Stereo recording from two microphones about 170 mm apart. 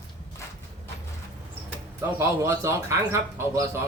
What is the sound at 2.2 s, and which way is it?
Speech, 15° right (ahead or behind).